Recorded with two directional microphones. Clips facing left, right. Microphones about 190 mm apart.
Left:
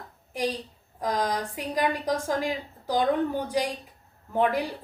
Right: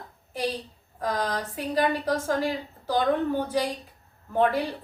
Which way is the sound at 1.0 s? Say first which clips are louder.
Left 1 dB; 15° left (ahead or behind).